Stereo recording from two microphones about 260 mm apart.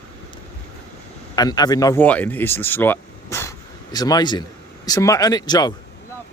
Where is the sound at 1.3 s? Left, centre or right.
Centre.